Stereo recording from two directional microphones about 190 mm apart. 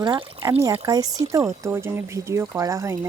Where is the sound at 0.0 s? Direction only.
25° right (ahead or behind).